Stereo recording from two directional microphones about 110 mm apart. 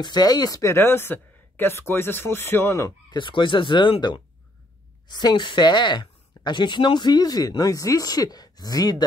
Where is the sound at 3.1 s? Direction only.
45° left (ahead or behind).